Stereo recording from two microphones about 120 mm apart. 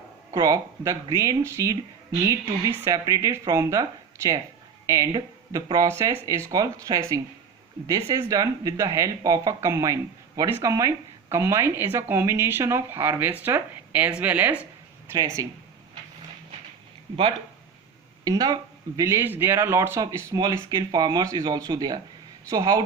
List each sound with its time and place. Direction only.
0.3 s speech: 30° right (ahead or behind)
2.8 s speech: 25° right (ahead or behind)
15.4 s speech: 30° right (ahead or behind)
18.3 s speech: 35° right (ahead or behind)
20.0 s speech: 30° right (ahead or behind)